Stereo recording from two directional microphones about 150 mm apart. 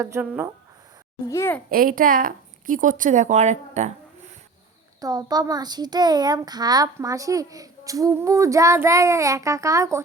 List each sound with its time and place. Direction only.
0.0 s a child's voice: 20° right (ahead or behind)
1.3 s a child's voice: 15° left (ahead or behind)
1.7 s a woman's voice: 70° right (ahead or behind); by 3.9 s 50° right (ahead or behind)
4.9 s a child's voice: 25° right (ahead or behind)